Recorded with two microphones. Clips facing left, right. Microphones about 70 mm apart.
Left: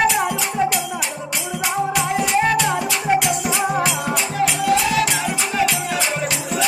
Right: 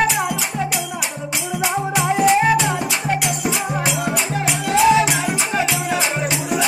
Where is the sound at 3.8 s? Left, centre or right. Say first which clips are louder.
Even; centre.